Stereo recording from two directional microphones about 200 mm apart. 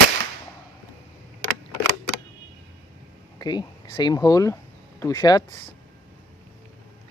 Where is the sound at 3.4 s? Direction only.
20° left (ahead or behind).